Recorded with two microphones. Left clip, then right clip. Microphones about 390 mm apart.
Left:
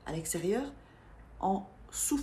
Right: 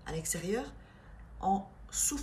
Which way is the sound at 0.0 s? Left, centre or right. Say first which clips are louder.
Left 3 dB; centre.